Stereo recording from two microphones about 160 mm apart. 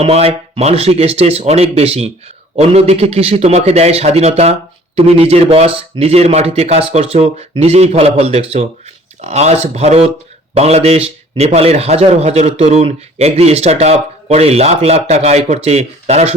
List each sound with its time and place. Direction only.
0.0 s a man's voice: 40° right (ahead or behind)